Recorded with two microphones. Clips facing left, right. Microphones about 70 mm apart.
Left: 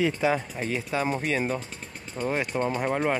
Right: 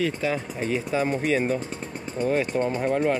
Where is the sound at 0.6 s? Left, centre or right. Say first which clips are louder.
Right 3 dB; centre.